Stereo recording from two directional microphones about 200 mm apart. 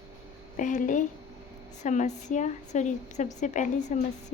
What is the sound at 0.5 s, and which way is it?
A woman's voice, 40° left (ahead or behind).